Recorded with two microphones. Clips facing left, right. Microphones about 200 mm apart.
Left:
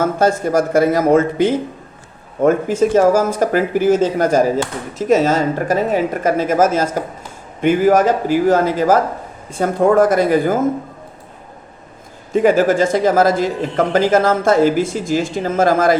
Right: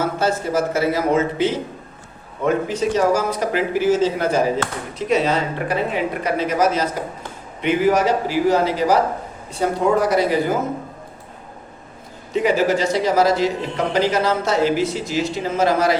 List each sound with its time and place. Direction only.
0.0 s a man's voice: 50° left (ahead or behind)
12.3 s a man's voice: 50° left (ahead or behind)